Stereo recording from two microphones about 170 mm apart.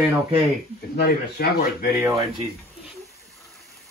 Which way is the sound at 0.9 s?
65° left (ahead or behind).